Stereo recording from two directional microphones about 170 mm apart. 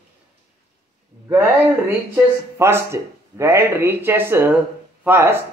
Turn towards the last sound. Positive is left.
turn(degrees=-10)  # may be behind; listen again after turning